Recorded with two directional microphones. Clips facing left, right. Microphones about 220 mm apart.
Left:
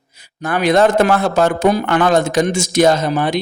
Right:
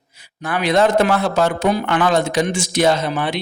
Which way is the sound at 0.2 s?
45° left (ahead or behind).